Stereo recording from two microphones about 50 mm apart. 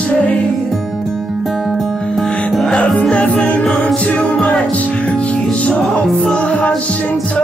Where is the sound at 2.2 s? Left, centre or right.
Left.